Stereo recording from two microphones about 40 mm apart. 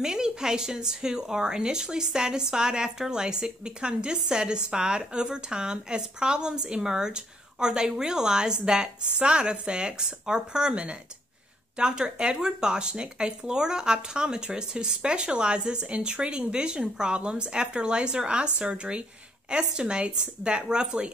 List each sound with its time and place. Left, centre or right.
0.0 s speech: centre
11.8 s speech: right